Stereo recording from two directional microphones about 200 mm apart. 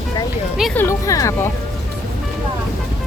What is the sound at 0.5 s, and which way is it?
Speech, centre (ahead or behind).